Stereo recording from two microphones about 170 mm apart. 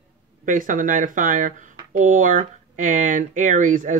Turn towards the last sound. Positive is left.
turn(degrees=-50)  # may be behind; listen again after turning